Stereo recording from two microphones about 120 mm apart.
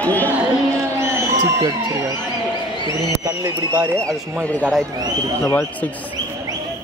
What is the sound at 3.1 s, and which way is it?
Speech, 25° right (ahead or behind).